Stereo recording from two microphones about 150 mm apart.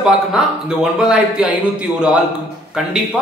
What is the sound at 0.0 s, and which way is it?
A man's voice, 5° right (ahead or behind).